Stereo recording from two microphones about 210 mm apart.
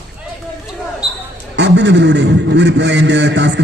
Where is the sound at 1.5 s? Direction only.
55° right (ahead or behind).